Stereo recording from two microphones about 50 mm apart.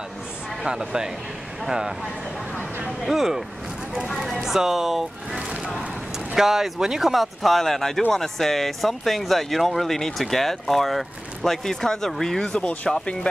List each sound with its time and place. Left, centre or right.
0.7 s speech: centre
3.0 s speech: centre
12.5 s speech: left